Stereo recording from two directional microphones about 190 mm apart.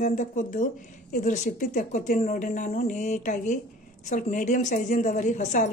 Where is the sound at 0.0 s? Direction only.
40° left (ahead or behind).